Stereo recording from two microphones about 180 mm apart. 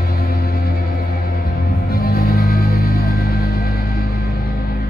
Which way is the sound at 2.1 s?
55° left (ahead or behind).